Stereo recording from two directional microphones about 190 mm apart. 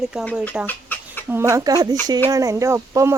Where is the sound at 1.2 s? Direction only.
15° right (ahead or behind).